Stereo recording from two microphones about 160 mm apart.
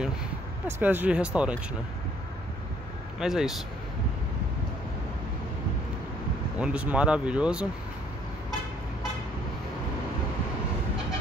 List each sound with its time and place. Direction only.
0.7 s speech: 10° right (ahead or behind)
3.2 s speech: 5° right (ahead or behind)
6.6 s speech: 5° right (ahead or behind)